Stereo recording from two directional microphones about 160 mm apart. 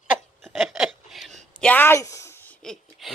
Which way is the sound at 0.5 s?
5° right (ahead or behind).